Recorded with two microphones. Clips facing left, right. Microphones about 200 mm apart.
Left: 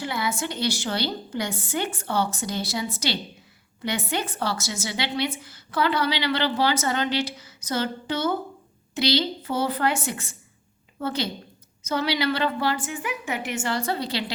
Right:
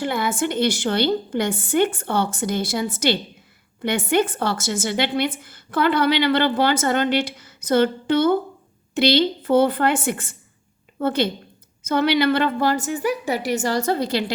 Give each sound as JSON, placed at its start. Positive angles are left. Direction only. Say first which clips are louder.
{"t": 0.0, "sound": "a woman's voice", "louder": "right 6 dB", "side_deg": -55}